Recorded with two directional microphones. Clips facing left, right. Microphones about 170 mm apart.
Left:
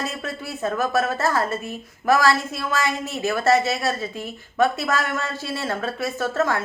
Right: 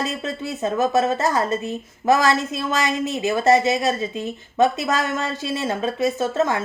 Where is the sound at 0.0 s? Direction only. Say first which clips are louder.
Right 3 dB; 20° right (ahead or behind).